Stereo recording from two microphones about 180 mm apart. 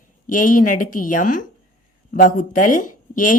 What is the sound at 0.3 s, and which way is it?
A woman's voice, 45° left (ahead or behind).